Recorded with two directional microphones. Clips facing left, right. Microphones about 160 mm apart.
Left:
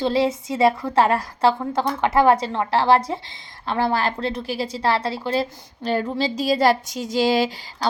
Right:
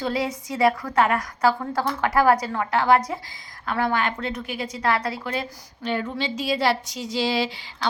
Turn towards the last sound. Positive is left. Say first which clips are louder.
# left 4 dB
turn(degrees=45)  # may be behind; listen again after turning